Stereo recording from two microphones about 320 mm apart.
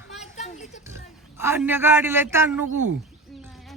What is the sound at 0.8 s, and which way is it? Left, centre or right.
Speech, centre.